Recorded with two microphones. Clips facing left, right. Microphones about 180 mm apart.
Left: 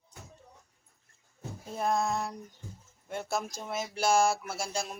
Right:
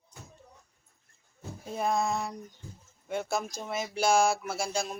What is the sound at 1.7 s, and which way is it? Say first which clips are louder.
Speech: right 1 dB; centre (ahead or behind).